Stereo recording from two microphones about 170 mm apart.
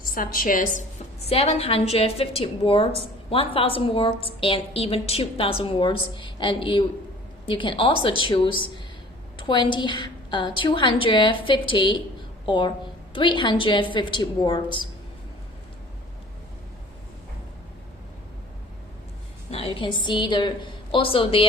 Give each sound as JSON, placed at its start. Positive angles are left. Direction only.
{"t": 0.0, "sound": "a woman's voice", "side_deg": 55}
{"t": 1.3, "sound": "a woman's voice", "side_deg": 35}
{"t": 19.7, "sound": "a woman's voice", "side_deg": 30}